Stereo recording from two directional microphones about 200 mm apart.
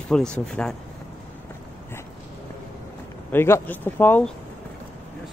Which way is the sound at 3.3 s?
10° left (ahead or behind).